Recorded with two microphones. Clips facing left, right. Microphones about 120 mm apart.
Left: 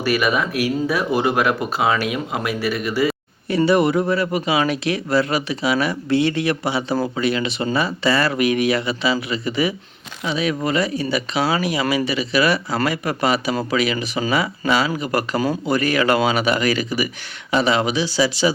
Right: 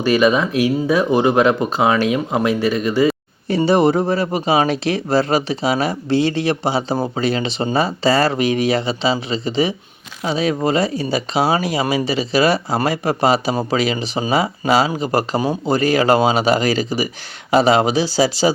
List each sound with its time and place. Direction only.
0.0 s speech: 20° right (ahead or behind); by 18.5 s 35° right (ahead or behind)